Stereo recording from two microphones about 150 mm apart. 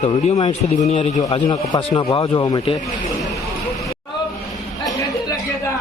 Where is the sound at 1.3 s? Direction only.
30° left (ahead or behind).